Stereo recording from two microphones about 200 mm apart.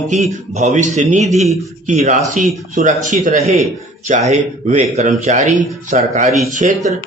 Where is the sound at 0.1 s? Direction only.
35° right (ahead or behind).